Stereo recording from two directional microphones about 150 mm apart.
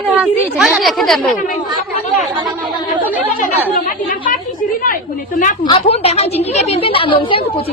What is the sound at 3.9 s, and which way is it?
A woman's voice, 65° left (ahead or behind).